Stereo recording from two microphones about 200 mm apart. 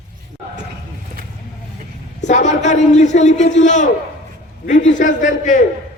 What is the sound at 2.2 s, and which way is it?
A man's voice, 35° left (ahead or behind).